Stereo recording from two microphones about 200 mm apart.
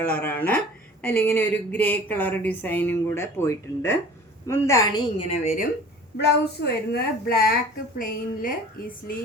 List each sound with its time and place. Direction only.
0.0 s a woman's voice: 10° left (ahead or behind)
5.4 s speech: 35° left (ahead or behind)
6.1 s a woman's voice: 55° left (ahead or behind)